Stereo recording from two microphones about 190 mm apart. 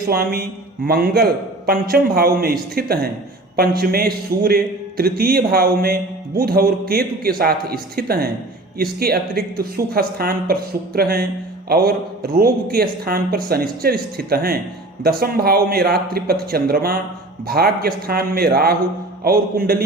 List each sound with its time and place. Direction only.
0.1 s a man's voice: 55° right (ahead or behind)